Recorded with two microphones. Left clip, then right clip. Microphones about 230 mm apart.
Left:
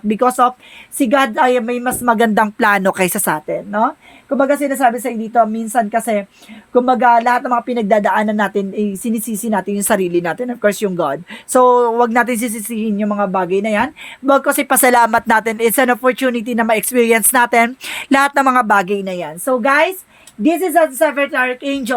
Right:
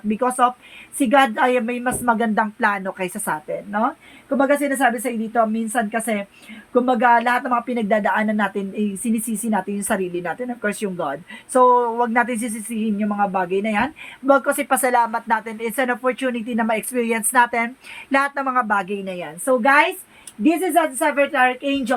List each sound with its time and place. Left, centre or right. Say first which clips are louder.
0.1 s speech: left 5 dB; left